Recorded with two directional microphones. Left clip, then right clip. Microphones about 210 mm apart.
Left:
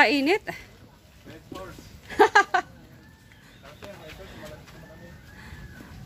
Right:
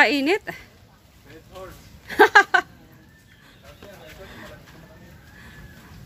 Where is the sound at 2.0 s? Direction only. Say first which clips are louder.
Right 4 dB; 20° right (ahead or behind).